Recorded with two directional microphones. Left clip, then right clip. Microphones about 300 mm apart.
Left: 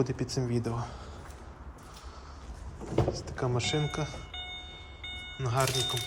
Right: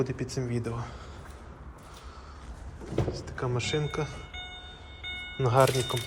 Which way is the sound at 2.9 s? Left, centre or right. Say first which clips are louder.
Left 2 dB; left.